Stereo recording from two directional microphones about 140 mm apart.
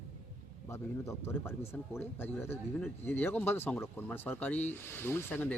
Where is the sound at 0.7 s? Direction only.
15° left (ahead or behind).